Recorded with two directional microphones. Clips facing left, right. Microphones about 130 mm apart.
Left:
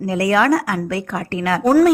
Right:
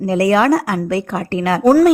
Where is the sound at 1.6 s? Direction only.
5° right (ahead or behind).